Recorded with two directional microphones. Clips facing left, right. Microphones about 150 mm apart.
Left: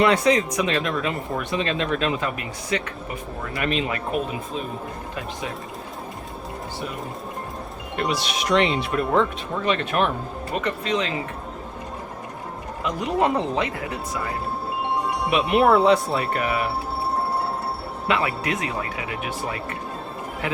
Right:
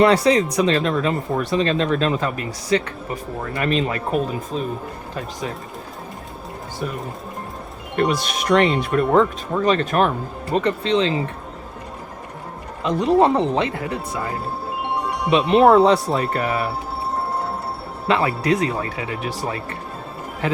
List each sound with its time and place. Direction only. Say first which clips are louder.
0.0 s speech: right 3 dB; 35° right (ahead or behind)
7.9 s speech: right 5 dB; 50° right (ahead or behind); by 11.2 s 30° right (ahead or behind)
12.8 s speech: right 6 dB; 30° right (ahead or behind)
15.3 s speech: right 5 dB; 30° right (ahead or behind)
18.1 s speech: right 5 dB; 35° right (ahead or behind)